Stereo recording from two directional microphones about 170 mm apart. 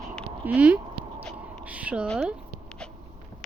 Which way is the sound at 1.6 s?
10° right (ahead or behind).